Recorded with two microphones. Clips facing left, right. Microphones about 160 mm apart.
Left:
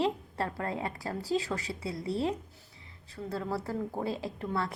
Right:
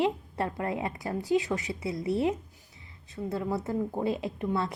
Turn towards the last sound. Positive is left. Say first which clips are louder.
# right 3 dB
turn(degrees=-20)  # may be behind; listen again after turning